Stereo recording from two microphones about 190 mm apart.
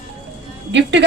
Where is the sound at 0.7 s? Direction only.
70° right (ahead or behind).